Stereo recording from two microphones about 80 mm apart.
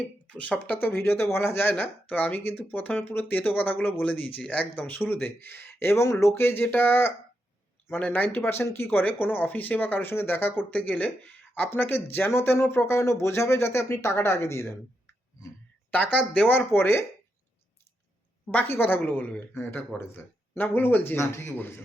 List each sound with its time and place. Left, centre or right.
0.3 s speech: centre
8.4 s speech: left
10.8 s speech: centre; by 15.1 s left
16.1 s speech: centre
18.5 s speech: left
21.2 s speech: left